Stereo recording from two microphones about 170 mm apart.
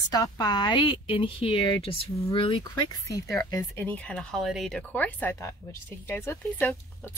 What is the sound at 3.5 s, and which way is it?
Speech, 10° left (ahead or behind).